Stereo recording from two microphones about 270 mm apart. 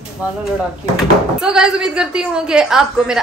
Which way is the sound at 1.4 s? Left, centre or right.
Centre.